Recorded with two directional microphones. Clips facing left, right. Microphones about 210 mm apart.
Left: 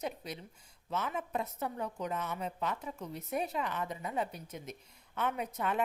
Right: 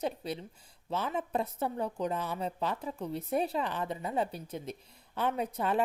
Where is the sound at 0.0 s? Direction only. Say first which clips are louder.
Right 5 dB; 30° right (ahead or behind).